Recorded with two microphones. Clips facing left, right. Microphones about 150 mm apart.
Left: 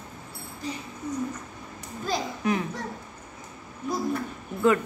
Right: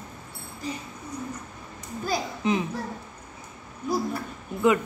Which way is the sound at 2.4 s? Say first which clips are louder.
Right 2 dB; 20° right (ahead or behind).